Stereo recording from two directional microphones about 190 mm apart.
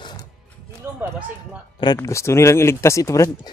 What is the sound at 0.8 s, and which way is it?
Run, 15° right (ahead or behind).